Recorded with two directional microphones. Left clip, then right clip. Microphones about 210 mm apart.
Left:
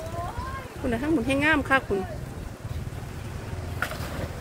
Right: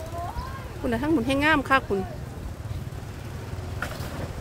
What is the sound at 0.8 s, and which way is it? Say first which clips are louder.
Speech: right 1 dB; 15° right (ahead or behind).